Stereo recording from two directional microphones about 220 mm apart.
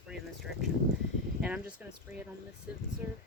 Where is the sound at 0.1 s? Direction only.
Centre (ahead or behind).